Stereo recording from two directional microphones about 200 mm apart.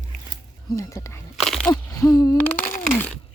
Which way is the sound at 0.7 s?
15° left (ahead or behind).